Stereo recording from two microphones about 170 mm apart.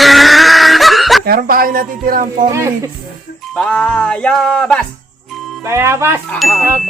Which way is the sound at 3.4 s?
5° left (ahead or behind).